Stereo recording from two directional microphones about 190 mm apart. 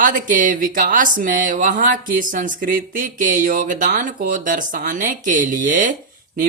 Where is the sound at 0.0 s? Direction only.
45° right (ahead or behind).